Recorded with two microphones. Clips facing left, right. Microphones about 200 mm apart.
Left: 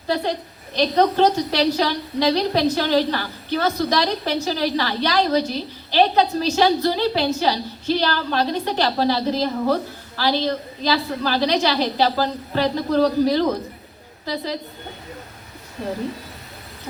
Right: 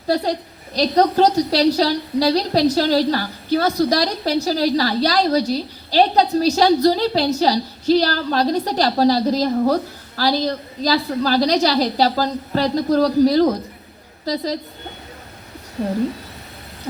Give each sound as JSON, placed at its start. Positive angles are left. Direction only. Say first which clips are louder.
{"t": 0.8, "sound": "a woman's voice", "louder": "right 2 dB", "side_deg": -35}